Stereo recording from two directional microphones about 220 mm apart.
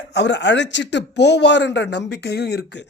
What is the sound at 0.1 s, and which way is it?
Speech, 50° left (ahead or behind).